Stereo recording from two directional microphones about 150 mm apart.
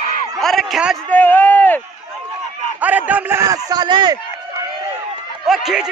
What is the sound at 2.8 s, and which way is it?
A man's voice, 10° right (ahead or behind).